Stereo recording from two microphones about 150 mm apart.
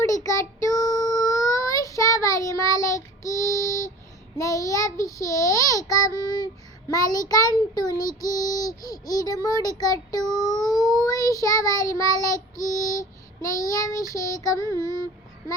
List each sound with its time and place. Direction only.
0.0 s child singing: 20° left (ahead or behind)
4.4 s a child's voice: 20° left (ahead or behind)